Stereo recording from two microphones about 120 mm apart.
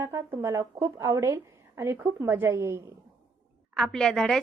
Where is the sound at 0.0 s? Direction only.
20° right (ahead or behind).